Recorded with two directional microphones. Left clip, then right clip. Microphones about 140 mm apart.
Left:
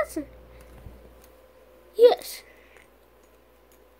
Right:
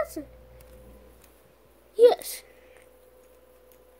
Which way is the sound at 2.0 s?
15° right (ahead or behind).